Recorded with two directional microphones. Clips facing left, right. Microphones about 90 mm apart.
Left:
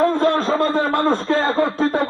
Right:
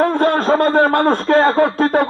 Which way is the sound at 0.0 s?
60° right (ahead or behind).